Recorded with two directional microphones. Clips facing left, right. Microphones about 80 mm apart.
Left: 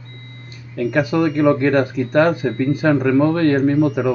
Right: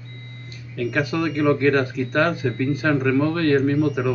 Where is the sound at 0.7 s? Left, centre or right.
Centre.